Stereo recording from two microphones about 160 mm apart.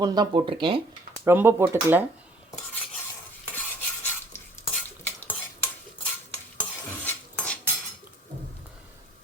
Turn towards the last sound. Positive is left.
turn(degrees=10)  # may be behind; listen again after turning